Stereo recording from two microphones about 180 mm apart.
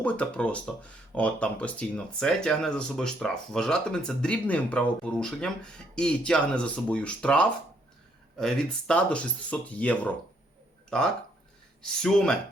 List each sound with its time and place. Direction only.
0.0 s speech: 5° left (ahead or behind)